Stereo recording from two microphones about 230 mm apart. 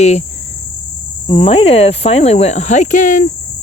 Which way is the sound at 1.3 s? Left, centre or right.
Left.